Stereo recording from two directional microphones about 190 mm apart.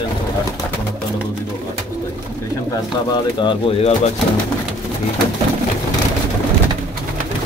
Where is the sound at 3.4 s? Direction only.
30° left (ahead or behind).